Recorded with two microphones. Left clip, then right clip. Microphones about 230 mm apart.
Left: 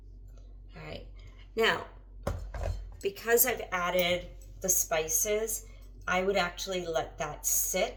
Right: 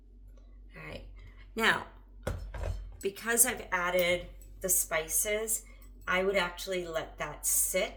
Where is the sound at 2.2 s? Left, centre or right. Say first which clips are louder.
Left 2 dB; centre.